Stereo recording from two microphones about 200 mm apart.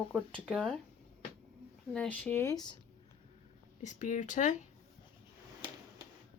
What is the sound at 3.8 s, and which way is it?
Speech, 40° left (ahead or behind).